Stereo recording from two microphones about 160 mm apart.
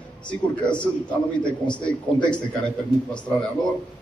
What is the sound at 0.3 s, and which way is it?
A man's voice, 5° left (ahead or behind).